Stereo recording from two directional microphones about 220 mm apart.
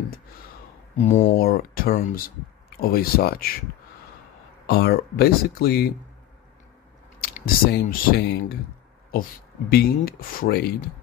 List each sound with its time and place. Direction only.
0.9 s speech: 30° left (ahead or behind)
4.6 s speech: 45° left (ahead or behind)
7.2 s speech: 40° left (ahead or behind)
9.7 s speech: 45° left (ahead or behind)